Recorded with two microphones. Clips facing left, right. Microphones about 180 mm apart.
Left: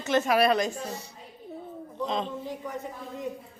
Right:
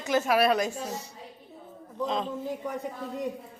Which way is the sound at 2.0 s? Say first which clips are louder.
Right 1 dB; 5° right (ahead or behind).